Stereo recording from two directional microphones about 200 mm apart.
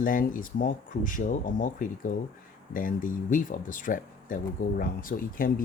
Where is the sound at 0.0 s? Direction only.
45° left (ahead or behind).